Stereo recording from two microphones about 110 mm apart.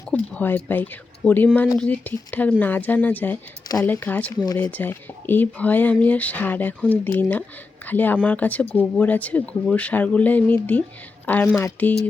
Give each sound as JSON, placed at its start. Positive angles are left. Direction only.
{"t": 0.1, "sound": "speech", "side_deg": 15}